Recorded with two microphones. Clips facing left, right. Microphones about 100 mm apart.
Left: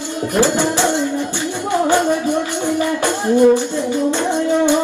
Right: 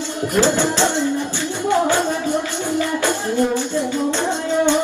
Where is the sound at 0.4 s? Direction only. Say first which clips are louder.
Left 1 dB; 15° left (ahead or behind).